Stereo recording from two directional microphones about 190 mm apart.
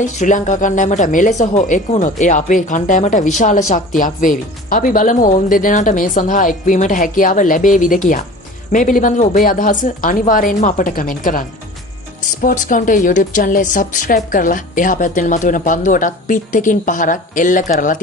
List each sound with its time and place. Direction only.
0.0 s a woman's voice: 40° left (ahead or behind)